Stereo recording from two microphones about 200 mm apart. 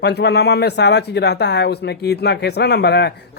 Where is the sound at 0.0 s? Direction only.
55° left (ahead or behind).